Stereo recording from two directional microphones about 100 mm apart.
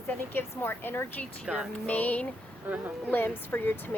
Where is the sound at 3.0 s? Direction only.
20° left (ahead or behind).